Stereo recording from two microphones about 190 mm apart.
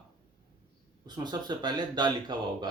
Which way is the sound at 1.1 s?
20° right (ahead or behind).